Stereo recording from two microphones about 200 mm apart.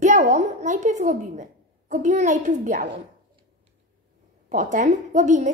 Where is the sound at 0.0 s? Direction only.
35° right (ahead or behind).